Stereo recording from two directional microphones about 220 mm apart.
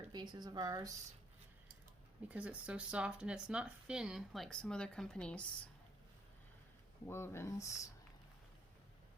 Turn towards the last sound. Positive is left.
turn(degrees=15)  # may be behind; listen again after turning